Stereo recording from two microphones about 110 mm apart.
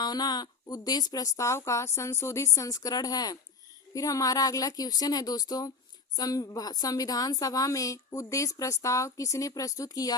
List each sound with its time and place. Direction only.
0.0 s a woman's voice: 40° left (ahead or behind)